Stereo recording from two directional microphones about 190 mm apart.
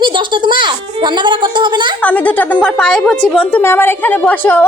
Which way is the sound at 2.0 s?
5° left (ahead or behind).